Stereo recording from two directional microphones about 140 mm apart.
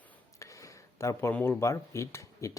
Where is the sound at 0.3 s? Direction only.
20° left (ahead or behind).